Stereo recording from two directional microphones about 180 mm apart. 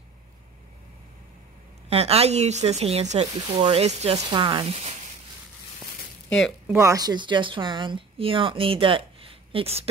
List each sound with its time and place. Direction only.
1.9 s speech: 35° right (ahead or behind)
6.7 s speech: 15° right (ahead or behind); by 9.8 s 35° right (ahead or behind)